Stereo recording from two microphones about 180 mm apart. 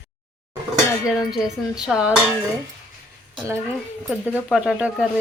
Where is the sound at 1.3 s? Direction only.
5° right (ahead or behind).